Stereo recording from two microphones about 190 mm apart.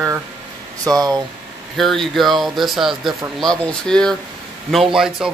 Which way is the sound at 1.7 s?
Centre (ahead or behind).